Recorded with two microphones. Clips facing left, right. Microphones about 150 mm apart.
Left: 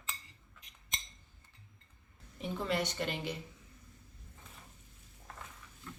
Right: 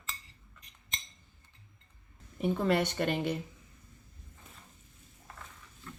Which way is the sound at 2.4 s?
55° right (ahead or behind).